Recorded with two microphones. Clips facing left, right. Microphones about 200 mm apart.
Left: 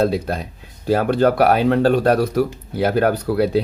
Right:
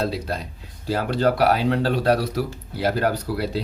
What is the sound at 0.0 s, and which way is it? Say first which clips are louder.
Speech: left 7 dB; 55° left (ahead or behind).